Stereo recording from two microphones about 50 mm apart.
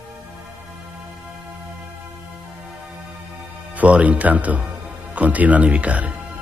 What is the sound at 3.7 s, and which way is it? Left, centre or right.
Speech, right.